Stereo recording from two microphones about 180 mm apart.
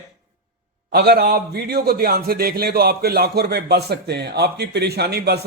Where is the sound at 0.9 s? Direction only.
60° right (ahead or behind).